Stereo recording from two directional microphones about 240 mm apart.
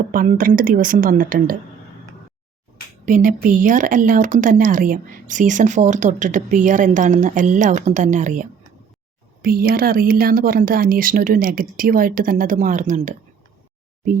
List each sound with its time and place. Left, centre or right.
0.1 s speech: right
3.1 s speech: right